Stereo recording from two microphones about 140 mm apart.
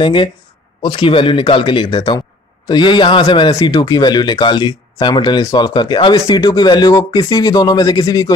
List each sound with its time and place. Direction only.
0.0 s a man's voice: 35° left (ahead or behind)